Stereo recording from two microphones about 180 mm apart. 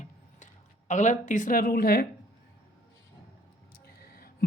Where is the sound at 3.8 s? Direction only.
60° left (ahead or behind).